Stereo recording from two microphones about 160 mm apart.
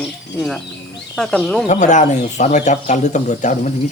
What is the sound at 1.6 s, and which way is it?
Speech, 50° left (ahead or behind).